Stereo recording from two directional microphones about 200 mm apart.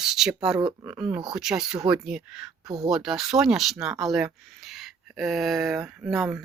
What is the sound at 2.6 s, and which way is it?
Speech, 15° right (ahead or behind).